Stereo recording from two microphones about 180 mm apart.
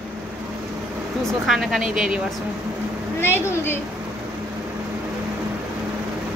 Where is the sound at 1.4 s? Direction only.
Centre (ahead or behind).